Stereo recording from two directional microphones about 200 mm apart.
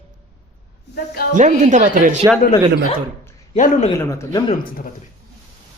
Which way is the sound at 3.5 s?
35° left (ahead or behind).